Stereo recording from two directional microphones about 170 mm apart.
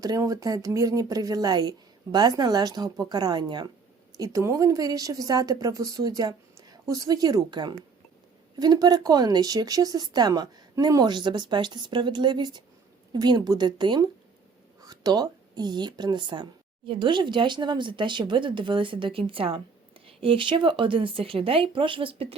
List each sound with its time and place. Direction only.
0.0 s a woman's voice: 20° right (ahead or behind)